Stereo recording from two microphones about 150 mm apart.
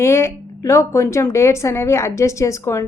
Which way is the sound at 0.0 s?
20° left (ahead or behind).